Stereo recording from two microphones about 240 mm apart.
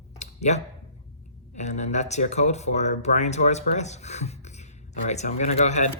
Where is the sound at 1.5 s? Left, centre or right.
Left.